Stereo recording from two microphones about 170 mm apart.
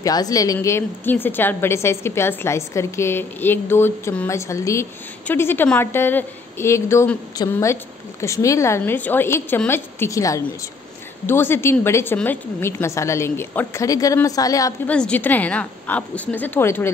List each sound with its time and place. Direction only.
0.0 s a woman's voice: 20° left (ahead or behind)
14.9 s a woman's voice: 5° left (ahead or behind)